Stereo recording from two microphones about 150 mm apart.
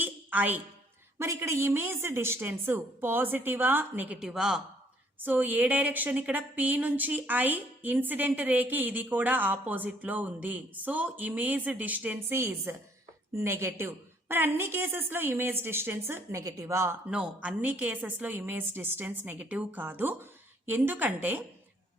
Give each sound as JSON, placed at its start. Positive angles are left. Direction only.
{"t": 0.0, "sound": "a sound", "side_deg": -10}
{"t": 1.2, "sound": "a woman's voice", "side_deg": -20}
{"t": 17.1, "sound": "speech", "side_deg": -5}